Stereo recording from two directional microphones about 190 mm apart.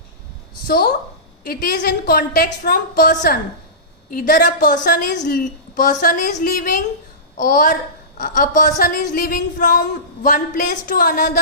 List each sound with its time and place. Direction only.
0.7 s a woman's voice: 50° left (ahead or behind)